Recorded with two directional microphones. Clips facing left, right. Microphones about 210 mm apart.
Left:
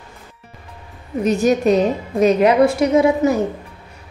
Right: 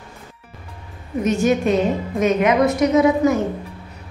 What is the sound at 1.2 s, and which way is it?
A woman's voice, 35° left (ahead or behind).